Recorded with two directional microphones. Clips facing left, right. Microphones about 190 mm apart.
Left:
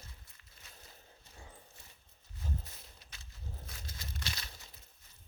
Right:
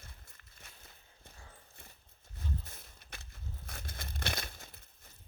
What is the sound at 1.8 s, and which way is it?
Horse, 55° right (ahead or behind).